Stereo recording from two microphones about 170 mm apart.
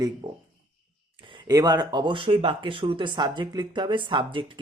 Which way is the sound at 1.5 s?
20° right (ahead or behind).